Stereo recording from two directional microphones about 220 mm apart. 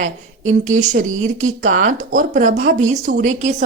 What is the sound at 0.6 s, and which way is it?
Speech, 35° right (ahead or behind).